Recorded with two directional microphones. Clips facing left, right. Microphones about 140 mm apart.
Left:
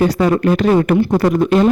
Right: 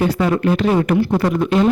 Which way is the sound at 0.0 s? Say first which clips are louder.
Left 3 dB; 40° left (ahead or behind).